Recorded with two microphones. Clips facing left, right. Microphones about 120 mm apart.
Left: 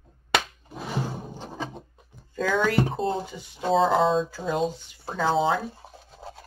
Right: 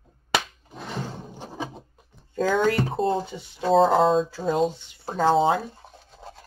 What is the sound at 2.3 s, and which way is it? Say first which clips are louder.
Speech: right 2 dB; 35° right (ahead or behind).